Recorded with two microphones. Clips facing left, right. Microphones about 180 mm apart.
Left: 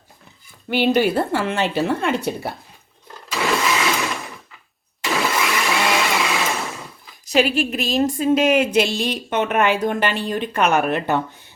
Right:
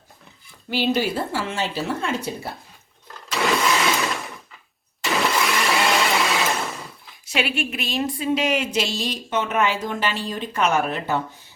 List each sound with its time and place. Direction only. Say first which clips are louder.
0.7 s a woman's voice: left 5 dB; 60° left (ahead or behind)
3.3 s blender: even; centre (ahead or behind)
7.3 s a woman's voice: left 7 dB; 40° left (ahead or behind); by 11.2 s 65° left (ahead or behind)